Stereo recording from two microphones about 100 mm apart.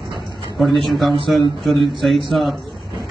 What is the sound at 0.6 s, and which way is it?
A man's voice, centre (ahead or behind).